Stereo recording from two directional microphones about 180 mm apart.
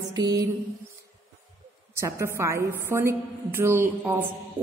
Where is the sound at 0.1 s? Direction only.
20° right (ahead or behind).